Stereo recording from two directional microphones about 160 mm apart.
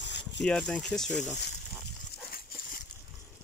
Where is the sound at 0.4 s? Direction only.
5° left (ahead or behind).